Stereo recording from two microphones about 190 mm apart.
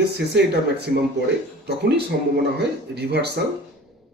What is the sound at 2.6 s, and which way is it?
Speech, 60° right (ahead or behind).